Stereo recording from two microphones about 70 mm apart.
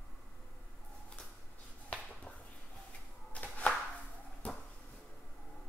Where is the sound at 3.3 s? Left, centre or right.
Centre.